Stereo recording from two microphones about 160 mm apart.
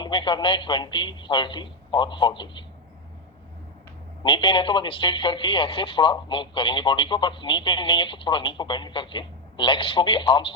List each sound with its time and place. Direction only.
0.0 s speech: 30° left (ahead or behind)
4.2 s speech: 30° left (ahead or behind)